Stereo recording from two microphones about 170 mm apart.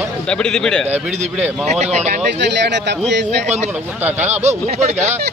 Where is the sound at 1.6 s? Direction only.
40° right (ahead or behind).